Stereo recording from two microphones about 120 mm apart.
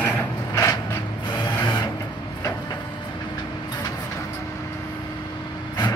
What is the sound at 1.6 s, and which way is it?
Printer, 35° left (ahead or behind).